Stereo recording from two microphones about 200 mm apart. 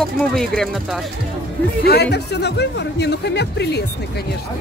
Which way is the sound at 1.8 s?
55° left (ahead or behind).